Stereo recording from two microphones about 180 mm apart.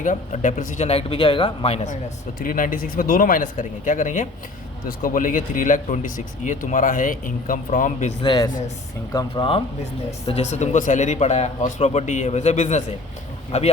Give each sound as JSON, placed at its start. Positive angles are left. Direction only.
{"t": 0.0, "sound": "speech", "side_deg": 45}
{"t": 2.4, "sound": "speech", "side_deg": 50}
{"t": 8.2, "sound": "speech", "side_deg": 25}